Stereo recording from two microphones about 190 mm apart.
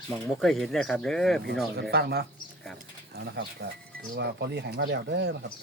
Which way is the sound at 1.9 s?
55° right (ahead or behind).